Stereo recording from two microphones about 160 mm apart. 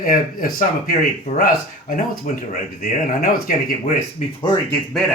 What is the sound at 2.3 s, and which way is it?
Speech, 55° left (ahead or behind).